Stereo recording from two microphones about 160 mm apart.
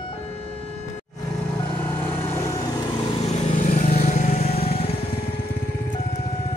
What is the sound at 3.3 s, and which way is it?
Vehicle, 50° left (ahead or behind).